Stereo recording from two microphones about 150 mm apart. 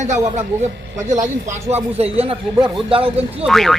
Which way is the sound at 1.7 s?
40° right (ahead or behind).